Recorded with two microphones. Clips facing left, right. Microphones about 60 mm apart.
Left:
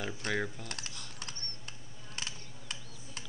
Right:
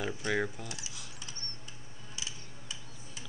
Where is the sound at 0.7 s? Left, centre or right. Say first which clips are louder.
Left 1 dB; left.